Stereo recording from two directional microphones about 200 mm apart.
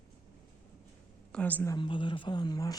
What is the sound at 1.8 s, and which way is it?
A man's voice, 25° left (ahead or behind).